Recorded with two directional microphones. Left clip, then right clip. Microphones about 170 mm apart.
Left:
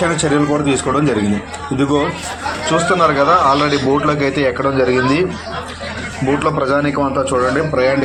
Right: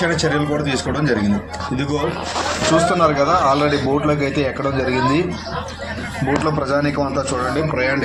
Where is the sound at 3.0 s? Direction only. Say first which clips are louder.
Left 3 dB; 15° left (ahead or behind).